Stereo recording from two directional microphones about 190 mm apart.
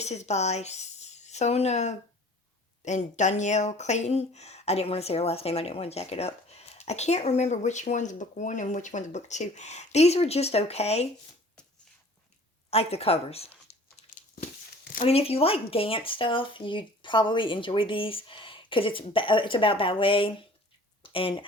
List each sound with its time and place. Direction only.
0.0 s speech: 35° left (ahead or behind)
12.7 s speech: 30° left (ahead or behind)
13.7 s a sound: 35° left (ahead or behind)
15.0 s speech: 30° left (ahead or behind)